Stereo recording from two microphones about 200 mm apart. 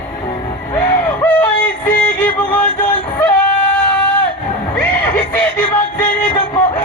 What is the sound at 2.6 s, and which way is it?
Music, 40° left (ahead or behind).